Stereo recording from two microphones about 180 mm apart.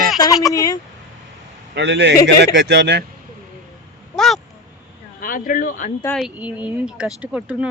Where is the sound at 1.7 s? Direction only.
80° right.